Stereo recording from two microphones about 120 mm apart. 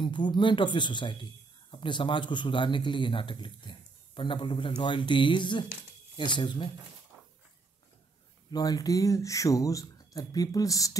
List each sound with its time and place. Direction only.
0.0 s a man's voice: 40° left (ahead or behind)
8.5 s speech: 30° left (ahead or behind)